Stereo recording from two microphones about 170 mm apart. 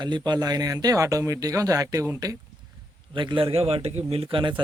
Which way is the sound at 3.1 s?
30° right (ahead or behind).